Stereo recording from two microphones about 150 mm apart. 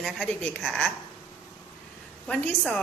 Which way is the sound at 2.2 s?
10° left (ahead or behind).